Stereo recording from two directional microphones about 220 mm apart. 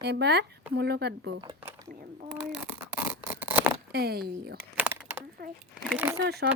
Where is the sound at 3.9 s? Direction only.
45° right (ahead or behind).